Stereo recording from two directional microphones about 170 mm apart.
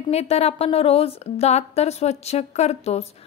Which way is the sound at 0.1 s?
40° left (ahead or behind).